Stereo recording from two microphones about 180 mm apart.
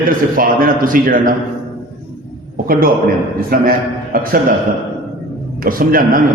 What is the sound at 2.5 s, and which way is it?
A man's voice, 55° right (ahead or behind).